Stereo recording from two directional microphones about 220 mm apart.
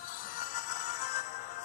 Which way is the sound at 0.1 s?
35° left (ahead or behind).